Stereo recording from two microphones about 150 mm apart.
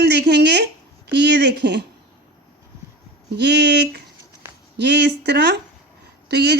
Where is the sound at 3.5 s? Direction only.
90° right.